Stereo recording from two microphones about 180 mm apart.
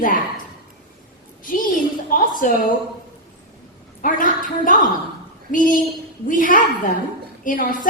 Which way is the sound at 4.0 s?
50° left (ahead or behind).